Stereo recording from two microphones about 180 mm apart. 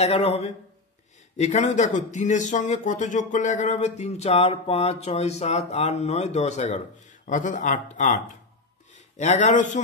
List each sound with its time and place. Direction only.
0.0 s a man's voice: 35° left (ahead or behind)